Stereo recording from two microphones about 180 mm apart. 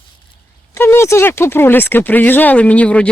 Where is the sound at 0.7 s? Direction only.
15° left (ahead or behind).